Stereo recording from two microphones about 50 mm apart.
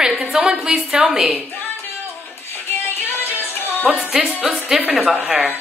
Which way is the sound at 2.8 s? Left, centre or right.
Left.